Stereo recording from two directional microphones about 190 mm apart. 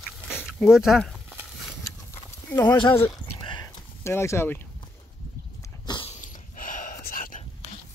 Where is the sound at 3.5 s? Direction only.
15° left (ahead or behind).